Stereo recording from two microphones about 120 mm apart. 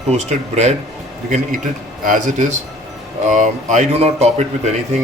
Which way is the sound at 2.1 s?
90° right.